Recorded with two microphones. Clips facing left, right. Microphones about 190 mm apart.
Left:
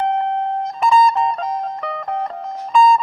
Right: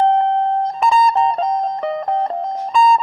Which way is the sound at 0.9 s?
30° right (ahead or behind).